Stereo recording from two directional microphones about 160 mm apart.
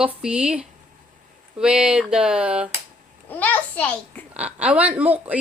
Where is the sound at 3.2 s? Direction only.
10° left (ahead or behind).